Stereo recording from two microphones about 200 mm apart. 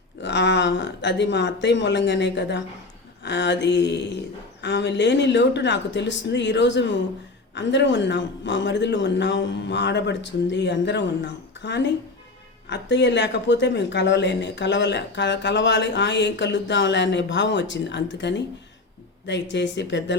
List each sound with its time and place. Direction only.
0.2 s speech: 65° left (ahead or behind)